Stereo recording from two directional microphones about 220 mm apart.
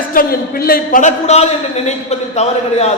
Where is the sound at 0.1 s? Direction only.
40° left (ahead or behind).